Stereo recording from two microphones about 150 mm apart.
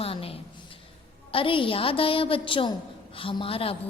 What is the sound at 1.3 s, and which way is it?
A woman's voice, 35° left (ahead or behind).